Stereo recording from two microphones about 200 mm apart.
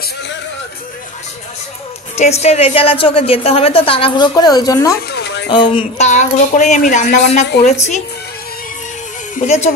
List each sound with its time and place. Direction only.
2.1 s a woman's voice: 35° left (ahead or behind)
5.1 s a sound: 55° left (ahead or behind)
5.5 s speech: 25° left (ahead or behind)
9.4 s speech: 35° left (ahead or behind)